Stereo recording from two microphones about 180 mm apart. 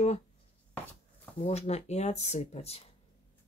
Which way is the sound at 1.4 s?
35° left (ahead or behind).